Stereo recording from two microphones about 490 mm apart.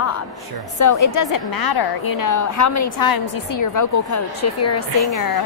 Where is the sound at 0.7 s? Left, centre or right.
Left.